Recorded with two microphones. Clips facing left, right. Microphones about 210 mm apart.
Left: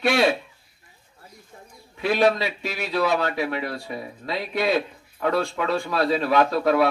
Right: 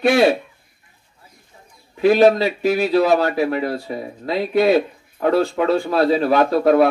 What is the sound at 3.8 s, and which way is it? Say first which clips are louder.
Speech: right 5 dB; 25° right (ahead or behind).